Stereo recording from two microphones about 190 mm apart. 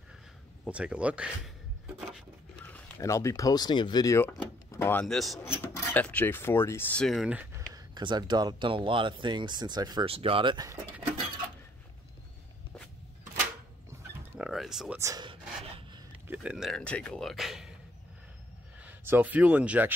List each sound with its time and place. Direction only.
0.7 s speech: 5° right (ahead or behind)
2.6 s speech: 10° left (ahead or behind); by 7.6 s 5° right (ahead or behind)
7.7 s speech: 25° right (ahead or behind)
14.3 s a sound: 5° right (ahead or behind)
15.0 s a sound: 20° right (ahead or behind)
16.3 s speech: 5° right (ahead or behind)
18.8 s speech: 10° right (ahead or behind)